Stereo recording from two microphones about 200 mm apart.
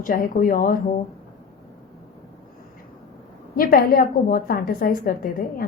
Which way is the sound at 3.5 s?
45° left (ahead or behind).